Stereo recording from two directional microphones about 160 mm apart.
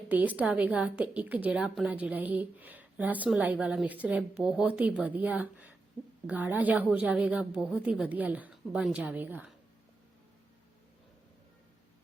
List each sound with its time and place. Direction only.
0.1 s a woman's voice: 10° right (ahead or behind)